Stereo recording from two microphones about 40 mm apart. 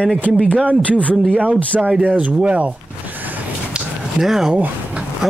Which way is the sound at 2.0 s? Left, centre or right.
Right.